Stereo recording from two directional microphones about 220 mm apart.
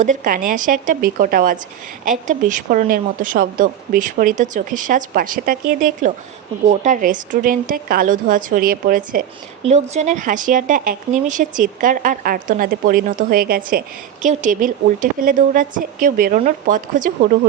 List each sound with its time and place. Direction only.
0.0 s speech: 35° right (ahead or behind)